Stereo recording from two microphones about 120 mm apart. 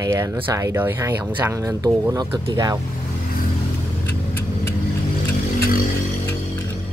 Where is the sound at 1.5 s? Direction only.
30° right (ahead or behind).